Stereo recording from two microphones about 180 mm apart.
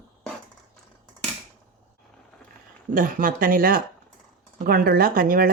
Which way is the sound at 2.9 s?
50° right (ahead or behind).